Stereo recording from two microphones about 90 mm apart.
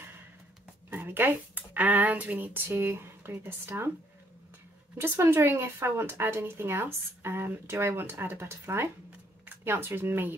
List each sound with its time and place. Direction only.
0.8 s speech: 25° right (ahead or behind)
5.0 s speech: 25° right (ahead or behind)